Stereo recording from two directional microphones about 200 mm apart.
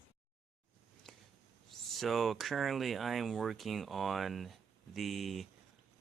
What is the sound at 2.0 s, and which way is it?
Speech, centre (ahead or behind).